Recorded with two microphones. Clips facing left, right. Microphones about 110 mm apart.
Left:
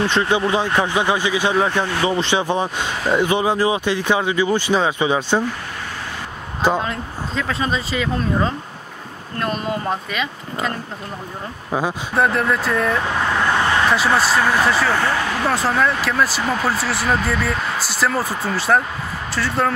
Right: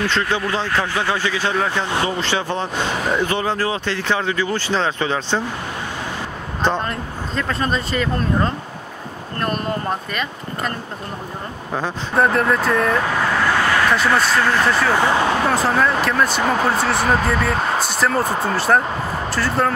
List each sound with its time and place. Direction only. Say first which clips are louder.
0.0 s speech: left 3 dB; 20° left (ahead or behind)
6.6 s speech: left 1 dB; 5° left (ahead or behind)
12.2 s speech: right 2 dB; centre (ahead or behind)
13.6 s vehicle: even; 25° left (ahead or behind)
13.9 s speech: even; centre (ahead or behind)
15.0 s speech: right 3 dB; 20° right (ahead or behind)
15.4 s speech: right 1 dB; centre (ahead or behind)